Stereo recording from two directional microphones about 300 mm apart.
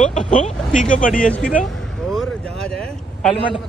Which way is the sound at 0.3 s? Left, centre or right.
Left.